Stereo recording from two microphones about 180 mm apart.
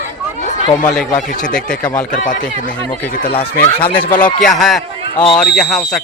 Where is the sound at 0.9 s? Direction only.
5° left (ahead or behind).